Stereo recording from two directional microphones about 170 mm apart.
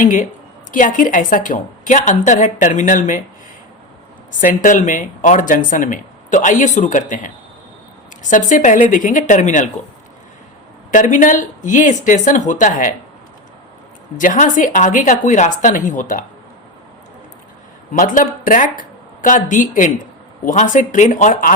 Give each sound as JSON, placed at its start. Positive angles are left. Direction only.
{"t": 0.0, "sound": "speech", "side_deg": 50}
{"t": 4.6, "sound": "speech", "side_deg": 50}
{"t": 8.3, "sound": "speech", "side_deg": 50}
{"t": 10.9, "sound": "speech", "side_deg": 50}
{"t": 14.2, "sound": "speech", "side_deg": 50}
{"t": 17.9, "sound": "speech", "side_deg": 50}